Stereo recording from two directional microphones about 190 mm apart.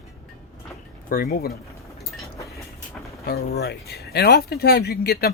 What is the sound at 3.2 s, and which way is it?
Speech, 55° left (ahead or behind).